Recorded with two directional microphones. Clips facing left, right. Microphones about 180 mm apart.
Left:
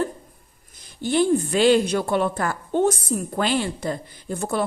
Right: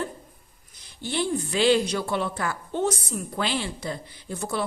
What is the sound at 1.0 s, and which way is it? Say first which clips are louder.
A woman's voice: left 7 dB; 50° left (ahead or behind).